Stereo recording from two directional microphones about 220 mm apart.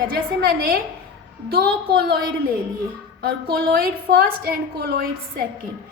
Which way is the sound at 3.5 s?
45° right (ahead or behind).